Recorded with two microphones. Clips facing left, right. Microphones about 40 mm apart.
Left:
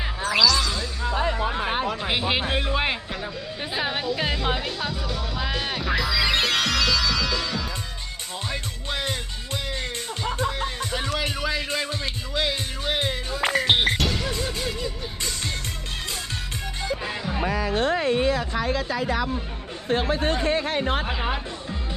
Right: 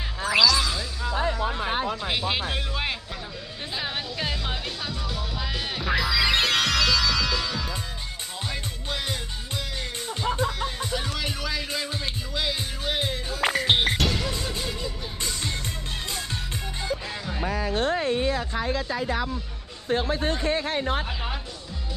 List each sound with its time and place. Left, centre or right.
0.3 s music: centre
1.3 s music: left
2.0 s music: centre
4.9 s music: centre
11.2 s music: centre
17.1 s music: left
17.4 s music: left
18.0 s a sound: left
19.9 s a sound: left
20.7 s music: left
21.0 s music: left